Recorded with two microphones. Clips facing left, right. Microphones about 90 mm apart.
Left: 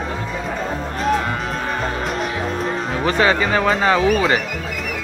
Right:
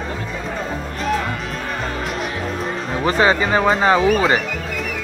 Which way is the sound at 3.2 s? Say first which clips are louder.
Right 1 dB; 25° right (ahead or behind).